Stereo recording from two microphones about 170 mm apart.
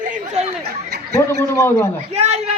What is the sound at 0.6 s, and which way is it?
Speech, 70° right (ahead or behind).